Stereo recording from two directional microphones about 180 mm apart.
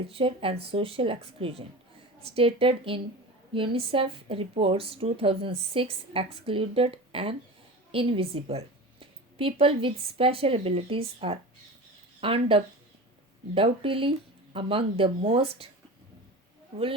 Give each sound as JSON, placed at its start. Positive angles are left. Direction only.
{"t": 0.1, "sound": "a woman's voice", "side_deg": -30}